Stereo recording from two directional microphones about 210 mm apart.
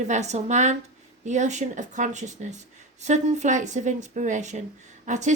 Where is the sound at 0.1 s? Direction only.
30° right (ahead or behind).